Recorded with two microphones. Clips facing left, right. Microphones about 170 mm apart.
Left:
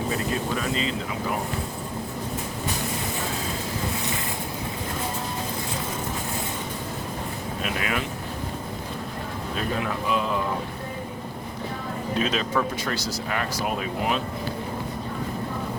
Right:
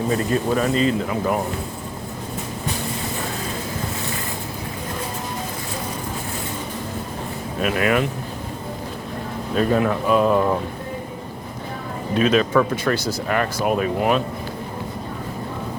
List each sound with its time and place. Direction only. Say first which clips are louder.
0.5 s speech: right 8 dB; 45° right (ahead or behind)
7.6 s speech: right 9 dB; 55° right (ahead or behind)
9.6 s speech: right 10 dB; 45° right (ahead or behind)
12.2 s speech: right 9 dB; 60° right (ahead or behind)